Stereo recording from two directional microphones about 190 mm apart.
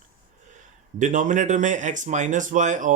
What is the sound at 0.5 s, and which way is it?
Speech, 40° right (ahead or behind).